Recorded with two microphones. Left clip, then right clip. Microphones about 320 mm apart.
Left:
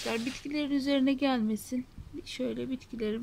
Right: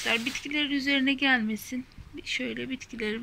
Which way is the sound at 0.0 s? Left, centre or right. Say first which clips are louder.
Right 6 dB; centre.